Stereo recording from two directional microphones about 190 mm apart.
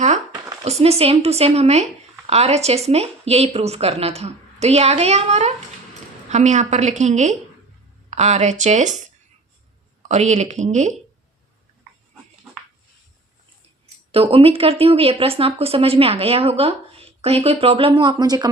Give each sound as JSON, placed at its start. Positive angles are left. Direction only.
{"t": 0.3, "sound": "a sound", "side_deg": -20}
{"t": 0.6, "sound": "speech", "side_deg": -35}
{"t": 10.1, "sound": "speech", "side_deg": -35}
{"t": 14.1, "sound": "speech", "side_deg": -30}